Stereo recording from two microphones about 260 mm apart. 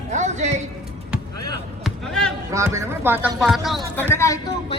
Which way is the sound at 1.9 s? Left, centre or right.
Centre.